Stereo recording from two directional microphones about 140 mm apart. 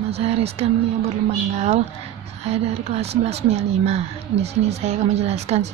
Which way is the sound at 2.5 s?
50° right (ahead or behind).